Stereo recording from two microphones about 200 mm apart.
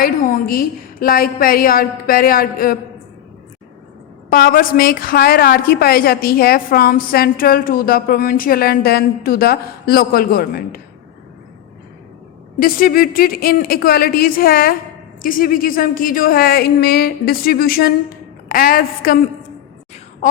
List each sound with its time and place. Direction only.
0.0 s a woman's voice: 45° left (ahead or behind)
4.3 s a woman's voice: 45° left (ahead or behind)
12.5 s a woman's voice: 45° left (ahead or behind)